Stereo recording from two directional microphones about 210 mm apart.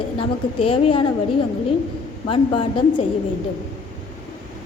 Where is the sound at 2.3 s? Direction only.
25° left (ahead or behind).